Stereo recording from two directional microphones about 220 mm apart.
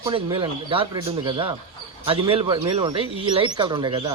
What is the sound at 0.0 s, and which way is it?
Speech, 20° right (ahead or behind).